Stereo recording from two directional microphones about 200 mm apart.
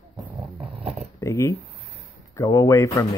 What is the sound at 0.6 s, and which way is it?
Dog, 30° right (ahead or behind).